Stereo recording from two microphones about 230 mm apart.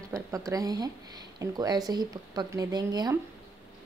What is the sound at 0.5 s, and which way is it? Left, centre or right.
A woman's voice, centre.